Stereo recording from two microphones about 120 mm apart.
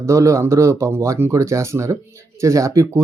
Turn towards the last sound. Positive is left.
turn(degrees=-25)  # may be behind; listen again after turning